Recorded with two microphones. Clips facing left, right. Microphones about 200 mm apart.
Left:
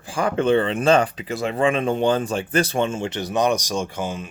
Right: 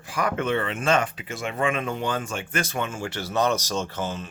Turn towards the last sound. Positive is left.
turn(degrees=10)  # may be behind; listen again after turning